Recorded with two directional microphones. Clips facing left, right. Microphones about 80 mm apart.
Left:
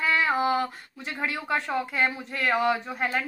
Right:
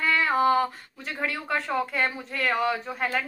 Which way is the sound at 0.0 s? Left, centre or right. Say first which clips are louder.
Right 1 dB; centre.